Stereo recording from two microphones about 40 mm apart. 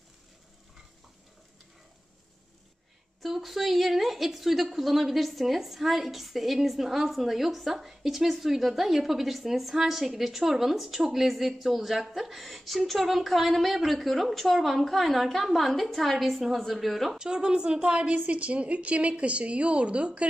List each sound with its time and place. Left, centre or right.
3.2 s a woman's voice: centre
17.2 s a woman's voice: right